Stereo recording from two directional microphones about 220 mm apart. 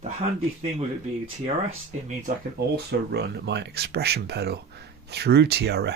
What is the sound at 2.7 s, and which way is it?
Speech, 50° right (ahead or behind).